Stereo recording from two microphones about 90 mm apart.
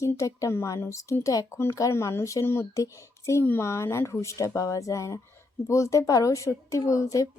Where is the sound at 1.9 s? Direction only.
30° left (ahead or behind).